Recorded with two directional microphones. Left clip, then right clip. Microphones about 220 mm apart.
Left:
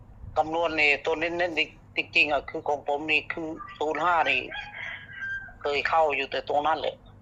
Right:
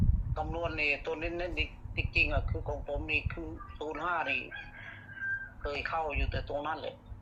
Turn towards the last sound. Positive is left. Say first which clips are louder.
# left 11 dB
turn(degrees=40)  # may be behind; listen again after turning